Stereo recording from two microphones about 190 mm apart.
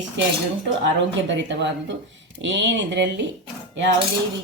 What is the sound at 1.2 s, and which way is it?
A woman's voice, 70° right (ahead or behind).